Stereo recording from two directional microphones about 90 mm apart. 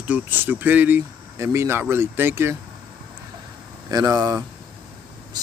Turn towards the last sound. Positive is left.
turn(degrees=-40)  # may be behind; listen again after turning